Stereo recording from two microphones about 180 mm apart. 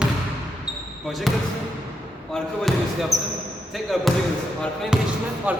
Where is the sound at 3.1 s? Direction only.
20° right (ahead or behind).